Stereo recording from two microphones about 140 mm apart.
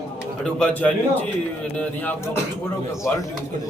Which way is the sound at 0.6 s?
10° left (ahead or behind).